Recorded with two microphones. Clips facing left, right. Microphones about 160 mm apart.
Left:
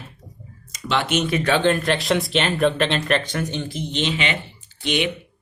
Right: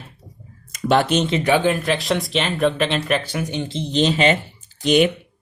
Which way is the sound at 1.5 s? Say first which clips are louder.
Even; 10° right (ahead or behind).